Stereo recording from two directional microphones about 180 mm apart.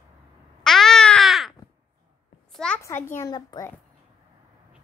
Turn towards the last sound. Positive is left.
turn(degrees=25)  # may be behind; listen again after turning